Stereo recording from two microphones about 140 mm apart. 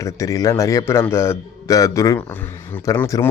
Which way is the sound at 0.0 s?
25° left (ahead or behind).